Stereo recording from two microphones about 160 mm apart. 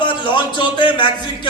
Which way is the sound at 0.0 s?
30° left (ahead or behind).